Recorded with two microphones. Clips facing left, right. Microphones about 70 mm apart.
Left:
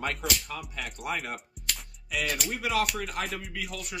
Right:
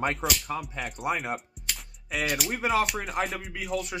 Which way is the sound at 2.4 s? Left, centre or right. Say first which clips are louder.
Right 4 dB; right.